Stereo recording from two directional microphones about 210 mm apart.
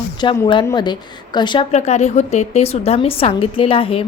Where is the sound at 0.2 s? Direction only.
20° left (ahead or behind).